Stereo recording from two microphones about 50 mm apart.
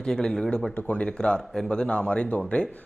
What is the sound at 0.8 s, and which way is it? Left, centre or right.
A man's voice, left.